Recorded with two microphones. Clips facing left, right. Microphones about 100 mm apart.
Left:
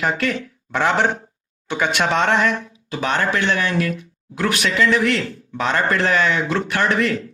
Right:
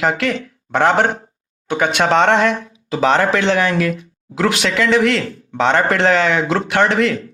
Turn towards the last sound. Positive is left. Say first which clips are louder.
# right 4 dB
turn(degrees=-80)